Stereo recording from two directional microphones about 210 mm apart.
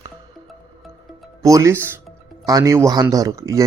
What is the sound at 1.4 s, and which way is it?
Speech, 15° right (ahead or behind).